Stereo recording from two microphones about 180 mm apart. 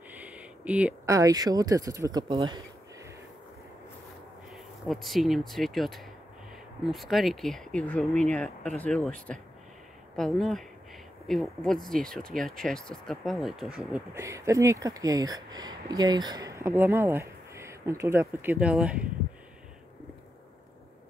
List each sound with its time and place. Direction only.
0.1 s a sound: 10° right (ahead or behind)
1.0 s speech: 20° right (ahead or behind)
4.5 s speech: centre (ahead or behind)